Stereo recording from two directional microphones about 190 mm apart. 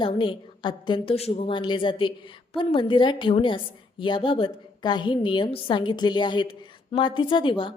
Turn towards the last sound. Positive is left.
turn(degrees=25)  # may be behind; listen again after turning